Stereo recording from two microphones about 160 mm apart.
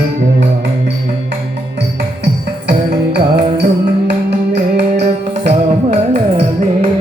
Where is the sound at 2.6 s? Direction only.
90° right.